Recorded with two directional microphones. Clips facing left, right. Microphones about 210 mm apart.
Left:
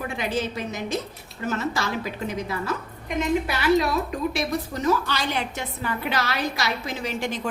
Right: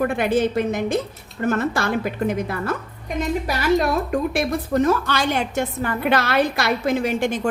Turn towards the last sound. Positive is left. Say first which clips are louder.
# right 7 dB
turn(degrees=-50)  # may be behind; listen again after turning